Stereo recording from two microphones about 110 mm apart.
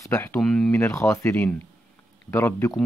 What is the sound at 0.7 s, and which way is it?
Speech, 20° left (ahead or behind).